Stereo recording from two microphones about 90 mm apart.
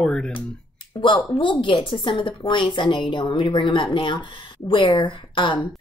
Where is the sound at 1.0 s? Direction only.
65° left (ahead or behind).